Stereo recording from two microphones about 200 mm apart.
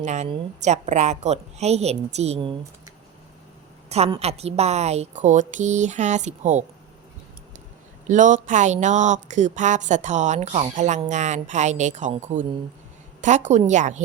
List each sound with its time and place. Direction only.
0.0 s speech: 35° right (ahead or behind)
8.0 s speech: 40° right (ahead or behind)